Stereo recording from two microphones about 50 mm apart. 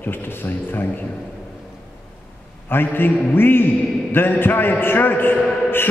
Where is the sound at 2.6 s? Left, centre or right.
Left.